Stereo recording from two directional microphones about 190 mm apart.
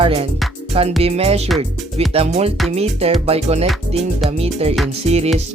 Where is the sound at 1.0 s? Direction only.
30° right (ahead or behind).